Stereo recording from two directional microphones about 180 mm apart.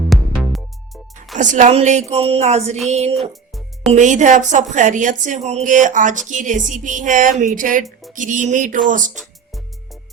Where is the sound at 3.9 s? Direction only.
45° right (ahead or behind).